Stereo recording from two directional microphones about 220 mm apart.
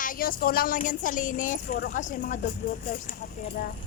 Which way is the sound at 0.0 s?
40° left (ahead or behind).